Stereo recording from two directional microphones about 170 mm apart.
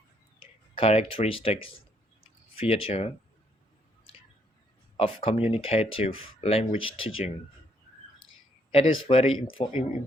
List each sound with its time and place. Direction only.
0.8 s speech: 35° left (ahead or behind)
2.6 s speech: 35° left (ahead or behind)
4.9 s speech: 35° left (ahead or behind)
8.7 s speech: 35° left (ahead or behind)